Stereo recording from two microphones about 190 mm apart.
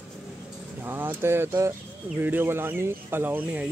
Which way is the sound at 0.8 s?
10° right (ahead or behind).